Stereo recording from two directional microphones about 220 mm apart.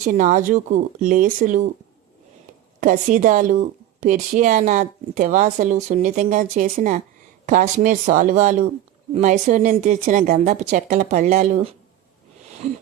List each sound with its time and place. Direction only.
0.0 s a woman's voice: 35° right (ahead or behind)
2.8 s a woman's voice: 35° right (ahead or behind)